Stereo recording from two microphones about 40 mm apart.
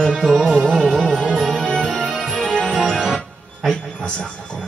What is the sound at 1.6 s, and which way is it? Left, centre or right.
Music, centre.